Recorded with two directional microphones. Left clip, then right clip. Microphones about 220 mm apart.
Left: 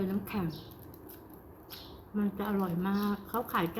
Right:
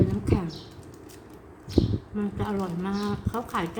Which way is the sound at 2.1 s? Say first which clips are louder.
Right 2 dB; 10° left (ahead or behind).